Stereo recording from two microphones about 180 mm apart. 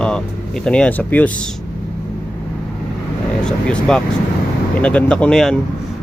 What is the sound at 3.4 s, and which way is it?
Speech, 5° left (ahead or behind).